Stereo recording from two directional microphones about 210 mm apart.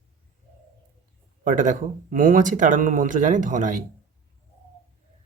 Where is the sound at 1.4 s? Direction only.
35° right (ahead or behind).